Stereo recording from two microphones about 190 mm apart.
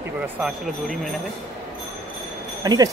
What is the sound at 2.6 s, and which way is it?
Speech, 20° right (ahead or behind).